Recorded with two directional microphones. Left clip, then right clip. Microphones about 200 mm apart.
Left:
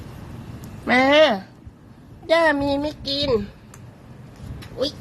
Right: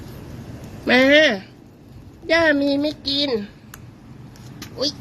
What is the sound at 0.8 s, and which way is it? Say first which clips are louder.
Speech: right 1 dB; 15° left (ahead or behind).